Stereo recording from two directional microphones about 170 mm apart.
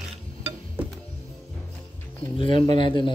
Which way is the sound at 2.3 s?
30° left (ahead or behind).